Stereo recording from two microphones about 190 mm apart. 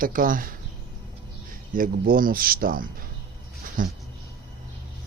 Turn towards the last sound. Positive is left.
turn(degrees=-45)  # may be behind; listen again after turning